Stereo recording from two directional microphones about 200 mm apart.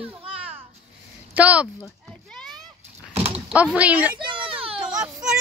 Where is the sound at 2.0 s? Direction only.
Centre (ahead or behind).